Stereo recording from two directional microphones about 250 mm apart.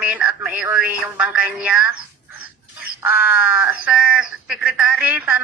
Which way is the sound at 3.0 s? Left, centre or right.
Centre.